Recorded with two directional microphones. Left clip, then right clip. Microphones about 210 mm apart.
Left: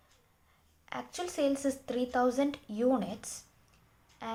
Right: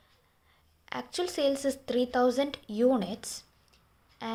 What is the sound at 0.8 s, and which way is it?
A woman's voice, 40° right (ahead or behind).